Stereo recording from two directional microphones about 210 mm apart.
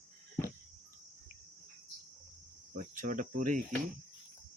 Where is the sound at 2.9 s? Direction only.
40° right (ahead or behind).